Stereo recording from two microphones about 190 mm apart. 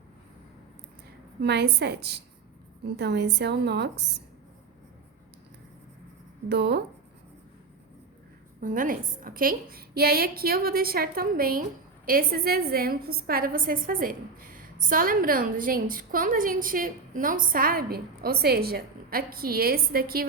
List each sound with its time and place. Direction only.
1.4 s a woman's voice: 60° right (ahead or behind)
6.5 s a woman's voice: 60° right (ahead or behind)
8.6 s a woman's voice: 45° right (ahead or behind)